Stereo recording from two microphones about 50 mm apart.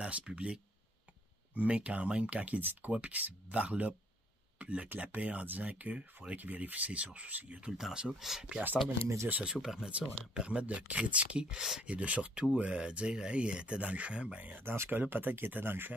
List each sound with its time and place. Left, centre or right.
0.0 s speech: centre
1.5 s speech: right
3.5 s speech: right
7.7 s speech: centre
9.0 s speech: right
9.3 s speech: right
11.5 s speech: centre
11.8 s speech: right
14.6 s speech: right